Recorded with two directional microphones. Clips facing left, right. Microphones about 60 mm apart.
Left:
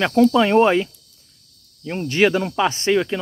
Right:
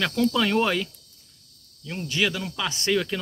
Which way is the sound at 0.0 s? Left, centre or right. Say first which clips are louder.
Left 8 dB; left.